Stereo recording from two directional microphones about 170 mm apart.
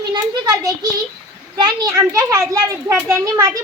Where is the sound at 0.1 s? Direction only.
25° right (ahead or behind).